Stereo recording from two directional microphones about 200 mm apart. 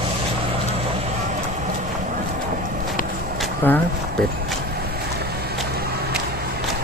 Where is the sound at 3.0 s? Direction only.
45° left (ahead or behind).